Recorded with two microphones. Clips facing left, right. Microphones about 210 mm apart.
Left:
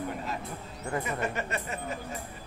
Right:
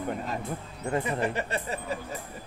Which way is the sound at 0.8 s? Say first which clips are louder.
Right 4 dB; 25° right (ahead or behind).